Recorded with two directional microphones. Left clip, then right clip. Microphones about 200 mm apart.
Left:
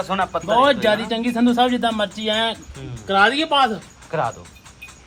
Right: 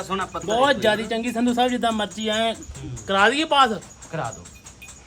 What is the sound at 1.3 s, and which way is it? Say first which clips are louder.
A man's voice: left 4 dB; 35° left (ahead or behind).